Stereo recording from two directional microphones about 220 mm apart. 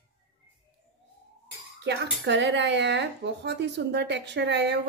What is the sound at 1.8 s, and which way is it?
Speech, 50° right (ahead or behind).